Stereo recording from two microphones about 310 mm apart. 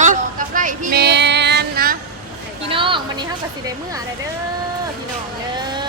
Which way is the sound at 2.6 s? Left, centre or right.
Centre.